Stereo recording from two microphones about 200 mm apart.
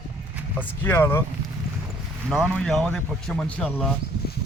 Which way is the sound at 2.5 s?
5° left (ahead or behind).